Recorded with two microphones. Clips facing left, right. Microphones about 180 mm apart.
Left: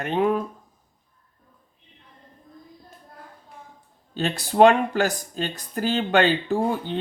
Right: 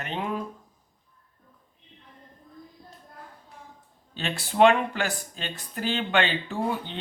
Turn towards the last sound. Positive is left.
turn(degrees=40)  # may be behind; listen again after turning